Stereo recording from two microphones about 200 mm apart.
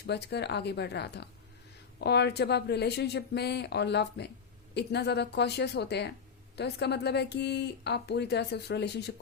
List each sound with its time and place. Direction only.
0.1 s speech: 55° left (ahead or behind)